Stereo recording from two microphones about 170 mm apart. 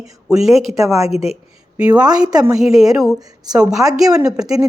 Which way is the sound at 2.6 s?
Centre (ahead or behind).